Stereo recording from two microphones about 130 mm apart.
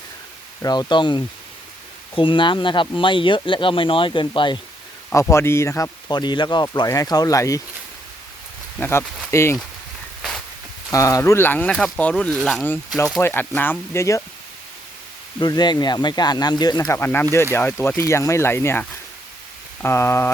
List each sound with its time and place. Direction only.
0.6 s speech: 30° left (ahead or behind)
5.3 s speech: 20° left (ahead or behind)
8.8 s speech: 20° left (ahead or behind)
10.9 s speech: 25° left (ahead or behind)
12.3 s speech: centre (ahead or behind)
13.2 s speech: 15° left (ahead or behind)
15.4 s speech: 35° left (ahead or behind)
16.9 s speech: 15° left (ahead or behind)